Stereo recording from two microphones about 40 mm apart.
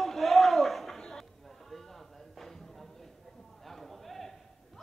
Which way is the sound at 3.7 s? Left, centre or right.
Centre.